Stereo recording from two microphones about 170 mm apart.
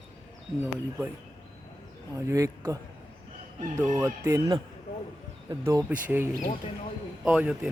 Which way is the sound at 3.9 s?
15° right (ahead or behind).